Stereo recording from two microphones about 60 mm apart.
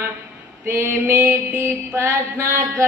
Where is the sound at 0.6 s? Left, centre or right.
Right.